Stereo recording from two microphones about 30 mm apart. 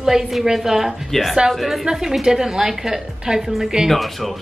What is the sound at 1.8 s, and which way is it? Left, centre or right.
A woman's voice, centre.